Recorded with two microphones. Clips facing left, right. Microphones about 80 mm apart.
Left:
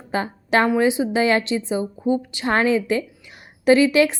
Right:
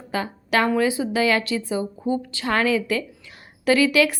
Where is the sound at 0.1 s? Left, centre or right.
Left.